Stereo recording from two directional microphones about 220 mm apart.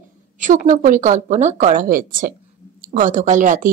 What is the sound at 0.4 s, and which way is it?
Speech, 35° right (ahead or behind).